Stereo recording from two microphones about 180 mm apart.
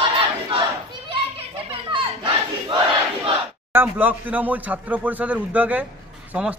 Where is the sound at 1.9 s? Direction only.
30° right (ahead or behind).